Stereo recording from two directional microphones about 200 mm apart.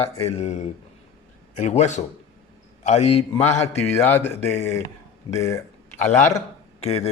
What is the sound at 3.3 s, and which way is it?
Speech, 10° left (ahead or behind).